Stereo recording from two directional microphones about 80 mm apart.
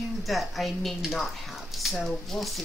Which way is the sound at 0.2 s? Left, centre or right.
Centre.